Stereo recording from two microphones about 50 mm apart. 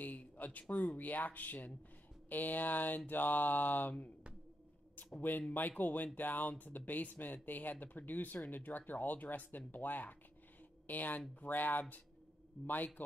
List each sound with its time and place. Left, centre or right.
0.0 s speech: left
5.5 s speech: left